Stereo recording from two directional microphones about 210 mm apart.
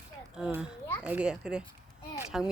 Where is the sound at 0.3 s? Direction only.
5° right (ahead or behind).